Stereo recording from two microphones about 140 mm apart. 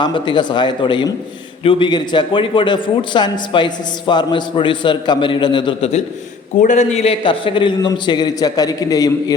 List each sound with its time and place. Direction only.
0.0 s a man's voice: 35° left (ahead or behind)
6.6 s a man's voice: 60° left (ahead or behind); by 9.3 s 25° left (ahead or behind)